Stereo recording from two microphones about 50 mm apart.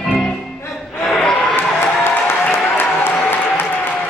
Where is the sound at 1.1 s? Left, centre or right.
Centre.